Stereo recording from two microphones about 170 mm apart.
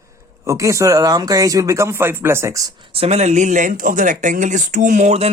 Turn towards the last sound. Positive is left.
turn(degrees=-40)  # may be behind; listen again after turning